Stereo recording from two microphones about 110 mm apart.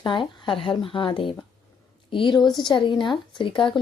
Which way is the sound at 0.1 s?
50° left (ahead or behind).